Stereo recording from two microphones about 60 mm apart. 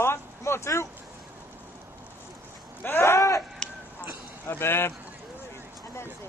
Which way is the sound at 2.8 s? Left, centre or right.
Left.